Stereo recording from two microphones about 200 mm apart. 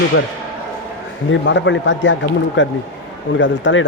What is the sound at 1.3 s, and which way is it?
Speech, 65° left (ahead or behind).